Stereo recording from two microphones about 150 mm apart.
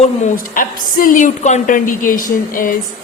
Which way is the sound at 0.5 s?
65° left (ahead or behind).